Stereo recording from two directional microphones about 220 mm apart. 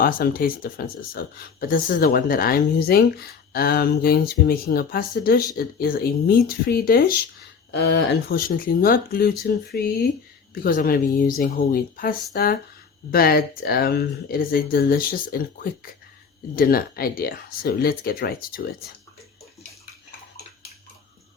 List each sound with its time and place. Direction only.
0.0 s speech: 40° left (ahead or behind)
16.6 s speech: 40° left (ahead or behind)